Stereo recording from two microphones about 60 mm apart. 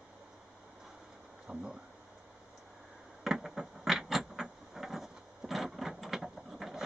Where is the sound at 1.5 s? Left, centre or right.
Right.